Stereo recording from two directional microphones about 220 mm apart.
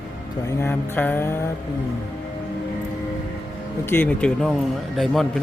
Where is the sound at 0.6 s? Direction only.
10° left (ahead or behind).